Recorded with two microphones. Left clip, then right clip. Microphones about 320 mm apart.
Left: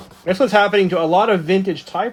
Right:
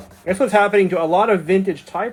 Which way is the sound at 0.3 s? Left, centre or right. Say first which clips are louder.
Left 1 dB; left.